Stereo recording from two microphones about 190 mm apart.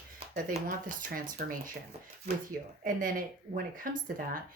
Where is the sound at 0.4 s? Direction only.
45° right (ahead or behind).